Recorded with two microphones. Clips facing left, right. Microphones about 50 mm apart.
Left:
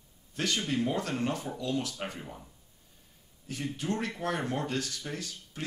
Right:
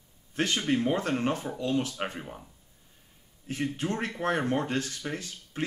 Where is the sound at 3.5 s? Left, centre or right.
Right.